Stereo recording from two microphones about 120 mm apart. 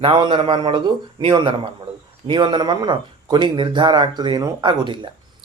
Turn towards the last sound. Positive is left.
turn(degrees=-40)  # may be behind; listen again after turning